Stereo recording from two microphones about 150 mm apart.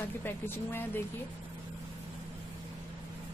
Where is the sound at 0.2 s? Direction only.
15° left (ahead or behind).